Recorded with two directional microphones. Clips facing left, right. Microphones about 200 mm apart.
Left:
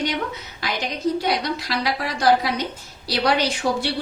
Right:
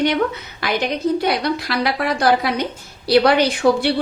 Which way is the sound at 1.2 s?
60° right (ahead or behind).